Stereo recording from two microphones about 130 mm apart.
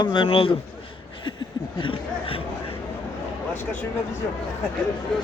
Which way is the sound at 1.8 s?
40° left (ahead or behind).